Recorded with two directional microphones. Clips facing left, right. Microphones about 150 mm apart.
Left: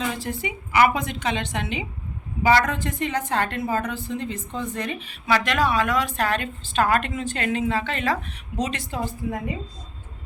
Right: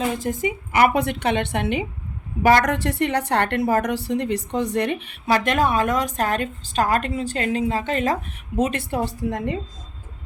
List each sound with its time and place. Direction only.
0.0 s a woman's voice: 45° right (ahead or behind)
0.9 s a woman's voice: 65° right (ahead or behind)
2.6 s a woman's voice: 75° right (ahead or behind)
5.3 s a woman's voice: 50° right (ahead or behind); by 9.6 s 65° right (ahead or behind)